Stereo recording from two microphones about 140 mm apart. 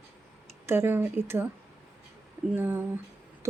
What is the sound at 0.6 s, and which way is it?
Speech, 15° right (ahead or behind).